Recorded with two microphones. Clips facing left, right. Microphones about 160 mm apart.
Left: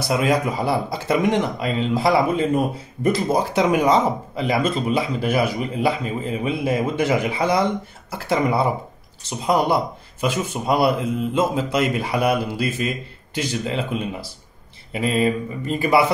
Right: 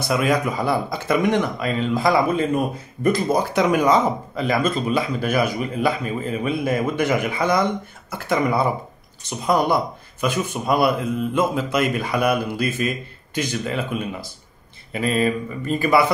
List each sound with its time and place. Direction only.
0.1 s speech: 25° left (ahead or behind)
10.2 s speech: 25° left (ahead or behind)